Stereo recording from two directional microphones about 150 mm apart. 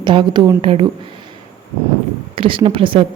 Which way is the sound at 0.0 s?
30° right (ahead or behind).